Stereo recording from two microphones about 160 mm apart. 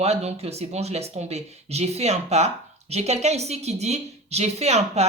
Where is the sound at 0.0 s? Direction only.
40° right (ahead or behind).